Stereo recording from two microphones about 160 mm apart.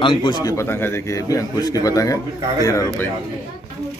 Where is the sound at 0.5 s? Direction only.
15° left (ahead or behind).